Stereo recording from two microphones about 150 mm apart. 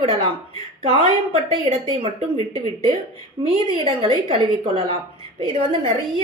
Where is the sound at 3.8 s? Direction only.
45° right (ahead or behind).